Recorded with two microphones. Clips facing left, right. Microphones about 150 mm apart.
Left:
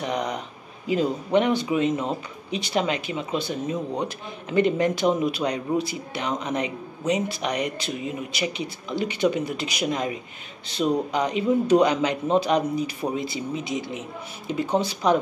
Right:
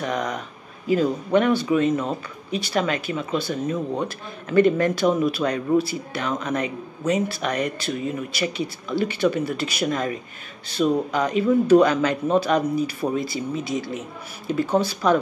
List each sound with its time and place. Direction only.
0.0 s speech: 20° left (ahead or behind)